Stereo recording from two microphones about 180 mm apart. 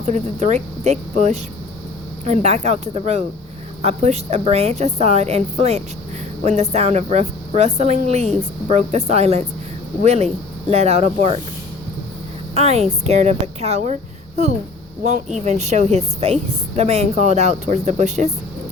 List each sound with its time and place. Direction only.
0.0 s a woman's voice: 40° right (ahead or behind)
12.5 s a woman's voice: 35° right (ahead or behind)
15.4 s a woman's voice: 40° right (ahead or behind)